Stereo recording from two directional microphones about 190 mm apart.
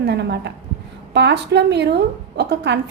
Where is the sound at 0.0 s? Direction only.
65° right (ahead or behind).